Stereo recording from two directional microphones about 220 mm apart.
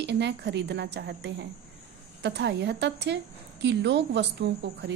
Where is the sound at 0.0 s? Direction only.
50° right (ahead or behind).